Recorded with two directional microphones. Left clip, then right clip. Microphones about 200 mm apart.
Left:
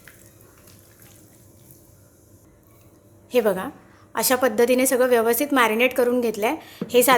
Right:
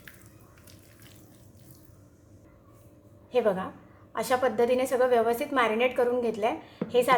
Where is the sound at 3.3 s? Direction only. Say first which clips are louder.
Left 5 dB; 30° left (ahead or behind).